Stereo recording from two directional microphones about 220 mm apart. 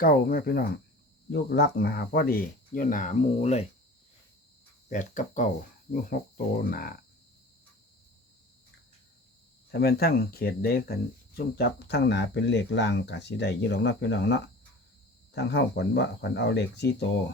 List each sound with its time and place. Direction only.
0.0 s speech: 40° left (ahead or behind)
4.9 s speech: 35° left (ahead or behind)
9.7 s speech: 45° left (ahead or behind)